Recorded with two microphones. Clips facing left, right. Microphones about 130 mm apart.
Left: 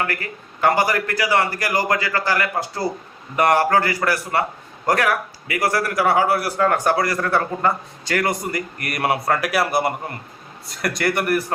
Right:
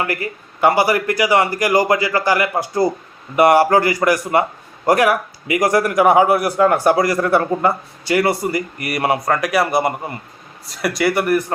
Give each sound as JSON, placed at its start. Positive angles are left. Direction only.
{"t": 0.0, "sound": "a man's voice", "side_deg": -15}